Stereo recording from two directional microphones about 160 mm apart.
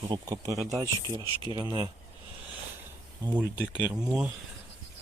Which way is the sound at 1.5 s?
25° right (ahead or behind).